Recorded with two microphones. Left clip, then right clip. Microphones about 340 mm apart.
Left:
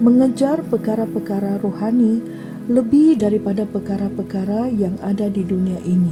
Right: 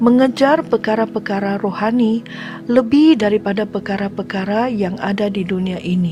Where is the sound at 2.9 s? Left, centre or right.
Right.